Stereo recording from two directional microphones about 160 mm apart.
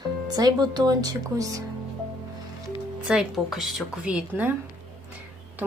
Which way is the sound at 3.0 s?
5° right (ahead or behind).